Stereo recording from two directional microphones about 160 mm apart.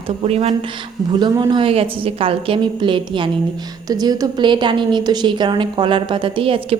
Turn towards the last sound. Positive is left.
turn(degrees=-35)  # may be behind; listen again after turning